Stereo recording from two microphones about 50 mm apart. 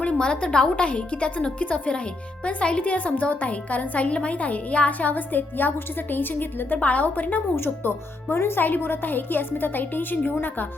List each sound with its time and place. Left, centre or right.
0.0 s a woman's voice: centre; by 6.7 s left
6.7 s speech: left
7.5 s speech: left
8.6 s speech: left